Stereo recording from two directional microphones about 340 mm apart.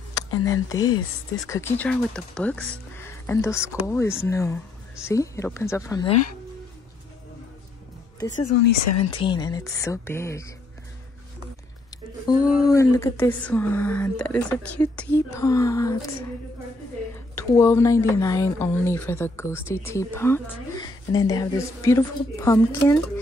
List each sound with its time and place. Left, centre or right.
0.5 s speech: centre
8.5 s speech: left
8.8 s speech: left
9.2 s speech: centre
12.3 s speech: centre
17.4 s speech: centre